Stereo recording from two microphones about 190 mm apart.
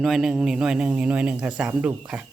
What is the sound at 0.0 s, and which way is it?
Speech, centre (ahead or behind).